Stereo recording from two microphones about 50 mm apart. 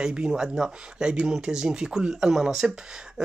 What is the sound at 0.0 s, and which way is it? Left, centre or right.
Speech, right.